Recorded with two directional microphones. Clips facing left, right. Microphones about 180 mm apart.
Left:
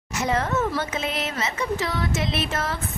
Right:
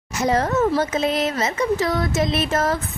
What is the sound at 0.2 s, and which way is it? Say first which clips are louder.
A woman's voice: right 5 dB; 40° right (ahead or behind).